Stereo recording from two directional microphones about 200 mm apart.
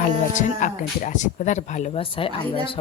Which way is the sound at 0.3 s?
40° left (ahead or behind).